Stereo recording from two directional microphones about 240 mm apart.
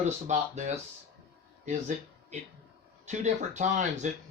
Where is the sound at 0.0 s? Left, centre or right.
Right.